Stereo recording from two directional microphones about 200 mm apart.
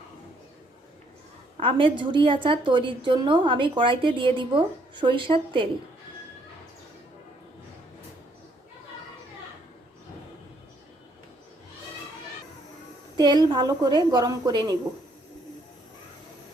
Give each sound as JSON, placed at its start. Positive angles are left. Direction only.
{"t": 1.5, "sound": "a woman's voice", "side_deg": -25}
{"t": 13.1, "sound": "a woman's voice", "side_deg": -20}